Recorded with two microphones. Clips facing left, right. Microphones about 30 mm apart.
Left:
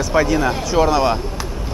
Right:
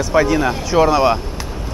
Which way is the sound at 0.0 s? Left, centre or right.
Centre.